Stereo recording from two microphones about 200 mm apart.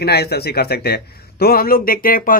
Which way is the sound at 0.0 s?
55° left (ahead or behind).